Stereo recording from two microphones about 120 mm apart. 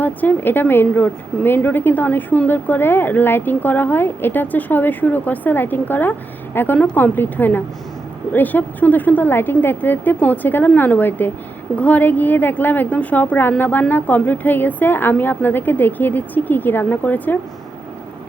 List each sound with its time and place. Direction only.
0.0 s a woman's voice: 15° left (ahead or behind)